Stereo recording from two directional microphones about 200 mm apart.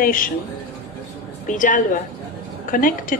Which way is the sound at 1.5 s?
40° left (ahead or behind).